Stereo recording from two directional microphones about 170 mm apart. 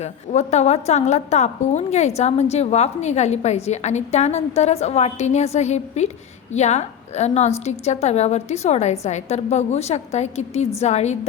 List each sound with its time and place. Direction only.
0.0 s a woman's voice: 40° left (ahead or behind)